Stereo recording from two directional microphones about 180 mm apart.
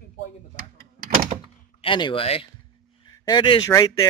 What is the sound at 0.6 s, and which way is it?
Power windows, 50° right (ahead or behind).